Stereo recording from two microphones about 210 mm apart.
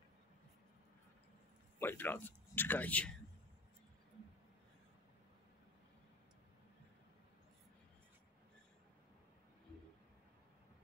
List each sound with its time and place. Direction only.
1.8 s speech: 10° left (ahead or behind)